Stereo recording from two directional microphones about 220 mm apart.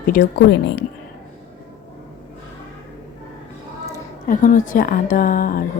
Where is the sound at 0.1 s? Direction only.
45° left (ahead or behind).